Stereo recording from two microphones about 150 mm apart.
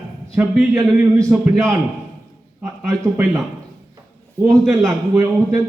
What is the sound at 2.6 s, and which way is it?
Speech, 15° right (ahead or behind).